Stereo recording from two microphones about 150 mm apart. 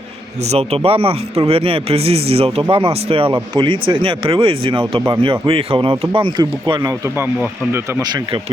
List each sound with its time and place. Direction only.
0.5 s speech: 40° right (ahead or behind)